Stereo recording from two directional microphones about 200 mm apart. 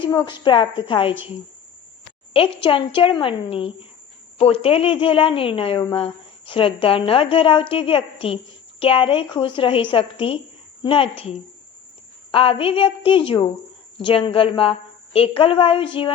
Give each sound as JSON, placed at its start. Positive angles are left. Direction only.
{"t": 0.0, "sound": "speech", "side_deg": 20}
{"t": 2.6, "sound": "a woman's voice", "side_deg": 25}